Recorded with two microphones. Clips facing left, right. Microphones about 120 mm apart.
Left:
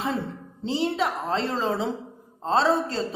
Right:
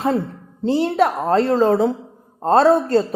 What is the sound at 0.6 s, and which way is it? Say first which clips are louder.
A woman's voice: right 8 dB; 55° right (ahead or behind).